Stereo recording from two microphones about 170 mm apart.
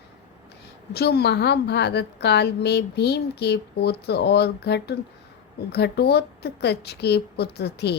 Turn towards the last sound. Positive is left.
turn(degrees=75)  # may be behind; listen again after turning